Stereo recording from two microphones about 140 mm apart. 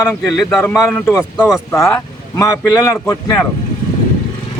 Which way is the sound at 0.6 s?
20° left (ahead or behind).